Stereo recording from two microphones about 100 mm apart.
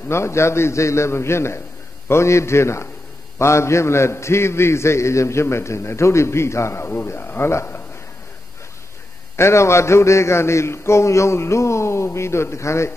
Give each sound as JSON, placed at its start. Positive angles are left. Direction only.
{"t": 0.1, "sound": "a man's voice", "side_deg": 25}
{"t": 9.4, "sound": "a man's voice", "side_deg": 30}